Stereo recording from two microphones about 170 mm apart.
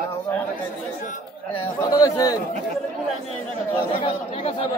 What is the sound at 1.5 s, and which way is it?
Speech, 20° left (ahead or behind).